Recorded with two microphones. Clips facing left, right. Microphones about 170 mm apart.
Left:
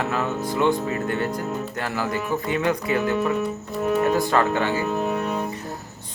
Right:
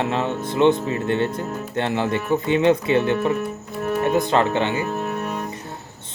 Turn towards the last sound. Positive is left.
turn(degrees=-20)  # may be behind; listen again after turning